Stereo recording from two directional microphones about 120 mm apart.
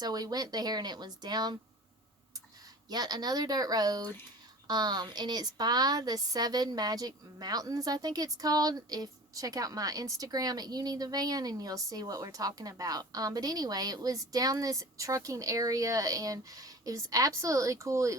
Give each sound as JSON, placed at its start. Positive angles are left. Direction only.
{"t": 0.0, "sound": "a woman's voice", "side_deg": -35}
{"t": 2.9, "sound": "a woman's voice", "side_deg": -35}